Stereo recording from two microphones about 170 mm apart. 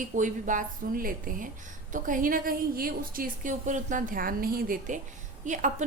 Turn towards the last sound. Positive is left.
turn(degrees=-45)  # may be behind; listen again after turning